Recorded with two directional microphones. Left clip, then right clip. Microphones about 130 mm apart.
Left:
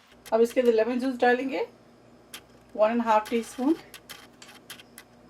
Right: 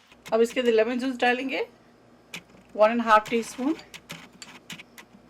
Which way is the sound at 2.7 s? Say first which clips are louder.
Right 3 dB; 35° right (ahead or behind).